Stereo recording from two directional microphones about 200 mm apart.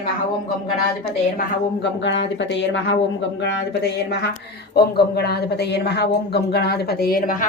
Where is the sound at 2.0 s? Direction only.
65° left (ahead or behind); by 7.3 s 45° left (ahead or behind).